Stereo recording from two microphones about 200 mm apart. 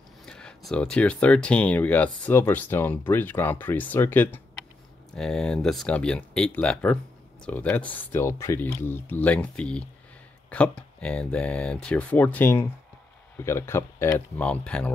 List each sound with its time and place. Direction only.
0.2 s speech: 5° left (ahead or behind)